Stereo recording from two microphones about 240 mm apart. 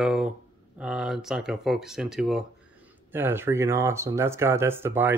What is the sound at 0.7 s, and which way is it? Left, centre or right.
Speech, centre.